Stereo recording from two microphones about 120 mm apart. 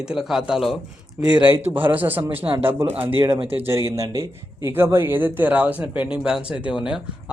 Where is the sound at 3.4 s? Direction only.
55° right (ahead or behind).